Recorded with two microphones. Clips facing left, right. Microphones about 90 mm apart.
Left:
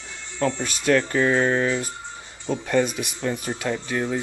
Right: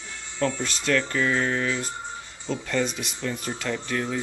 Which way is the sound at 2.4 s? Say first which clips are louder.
Left 5 dB; 15° left (ahead or behind).